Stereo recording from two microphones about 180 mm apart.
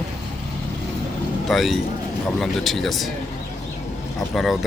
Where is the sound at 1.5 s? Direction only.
Centre (ahead or behind).